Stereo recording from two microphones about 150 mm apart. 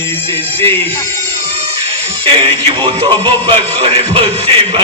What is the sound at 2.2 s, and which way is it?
Speech, 40° right (ahead or behind).